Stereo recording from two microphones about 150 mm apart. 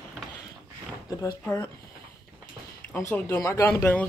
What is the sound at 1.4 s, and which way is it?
Speech, 10° left (ahead or behind).